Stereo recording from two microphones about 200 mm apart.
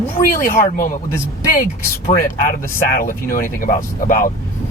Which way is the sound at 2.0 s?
40° left (ahead or behind).